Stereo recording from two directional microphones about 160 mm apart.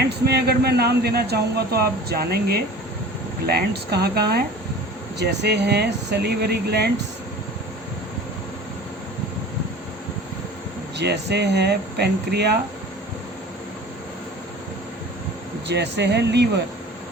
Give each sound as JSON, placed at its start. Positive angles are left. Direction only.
{"t": 0.3, "sound": "speech", "side_deg": -85}
{"t": 10.9, "sound": "speech", "side_deg": -90}
{"t": 15.6, "sound": "speech", "side_deg": -90}